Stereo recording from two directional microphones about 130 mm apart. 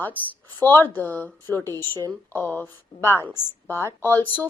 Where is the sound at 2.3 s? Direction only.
15° left (ahead or behind).